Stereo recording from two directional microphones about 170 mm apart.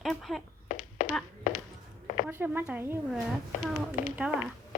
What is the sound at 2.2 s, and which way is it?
Speech, 10° right (ahead or behind).